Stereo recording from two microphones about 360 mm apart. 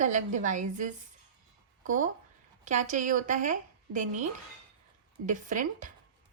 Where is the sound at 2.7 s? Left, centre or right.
Right.